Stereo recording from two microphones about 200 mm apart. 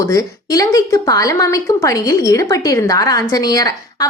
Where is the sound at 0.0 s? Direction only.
15° left (ahead or behind).